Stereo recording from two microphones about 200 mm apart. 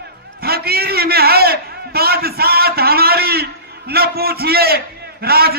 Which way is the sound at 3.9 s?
50° right (ahead or behind).